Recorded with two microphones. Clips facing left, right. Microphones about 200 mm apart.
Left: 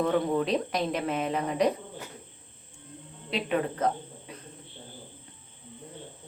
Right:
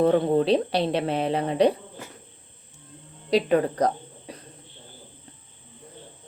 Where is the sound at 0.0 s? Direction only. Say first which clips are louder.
Right 6 dB; 35° right (ahead or behind).